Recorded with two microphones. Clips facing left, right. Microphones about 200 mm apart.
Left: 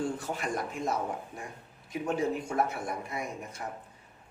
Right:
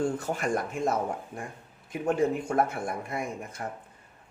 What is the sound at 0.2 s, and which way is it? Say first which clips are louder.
Speech: right 4 dB; 50° right (ahead or behind).